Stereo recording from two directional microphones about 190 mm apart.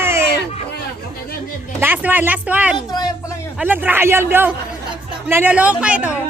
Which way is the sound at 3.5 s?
10° right (ahead or behind).